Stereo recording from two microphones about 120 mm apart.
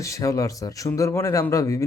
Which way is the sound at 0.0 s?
25° left (ahead or behind).